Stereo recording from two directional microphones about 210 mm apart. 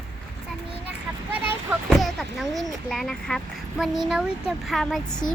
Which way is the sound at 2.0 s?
Centre (ahead or behind).